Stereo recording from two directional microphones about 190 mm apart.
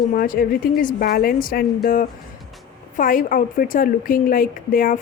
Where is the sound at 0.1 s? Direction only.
50° left (ahead or behind).